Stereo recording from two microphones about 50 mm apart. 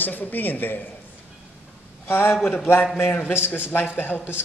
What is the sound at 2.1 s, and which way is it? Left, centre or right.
A man's voice, left.